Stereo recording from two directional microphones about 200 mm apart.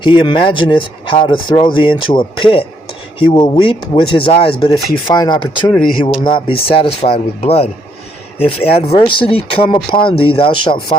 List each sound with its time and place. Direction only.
0.0 s speech: 25° left (ahead or behind)